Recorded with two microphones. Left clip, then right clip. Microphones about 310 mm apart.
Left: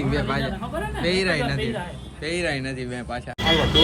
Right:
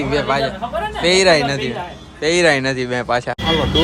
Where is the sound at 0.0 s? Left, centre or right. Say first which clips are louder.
Right 8 dB; centre.